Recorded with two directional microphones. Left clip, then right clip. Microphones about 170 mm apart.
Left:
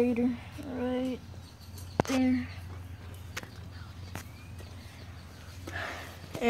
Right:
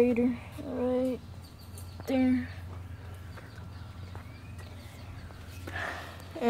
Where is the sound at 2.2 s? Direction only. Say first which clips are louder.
Right 1 dB; centre (ahead or behind).